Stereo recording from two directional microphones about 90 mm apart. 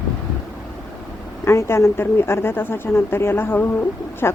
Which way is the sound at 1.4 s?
30° left (ahead or behind).